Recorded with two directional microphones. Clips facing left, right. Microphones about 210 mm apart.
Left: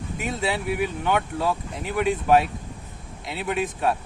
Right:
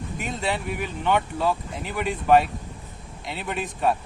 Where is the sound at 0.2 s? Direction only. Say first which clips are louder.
Left 2 dB; centre (ahead or behind).